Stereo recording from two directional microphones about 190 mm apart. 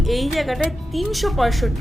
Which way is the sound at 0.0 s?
Centre (ahead or behind).